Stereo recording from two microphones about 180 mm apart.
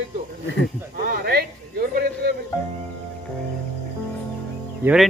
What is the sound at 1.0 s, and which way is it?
A man's voice, 60° right (ahead or behind).